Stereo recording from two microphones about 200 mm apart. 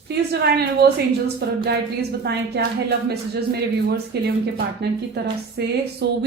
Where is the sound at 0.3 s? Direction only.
55° right (ahead or behind).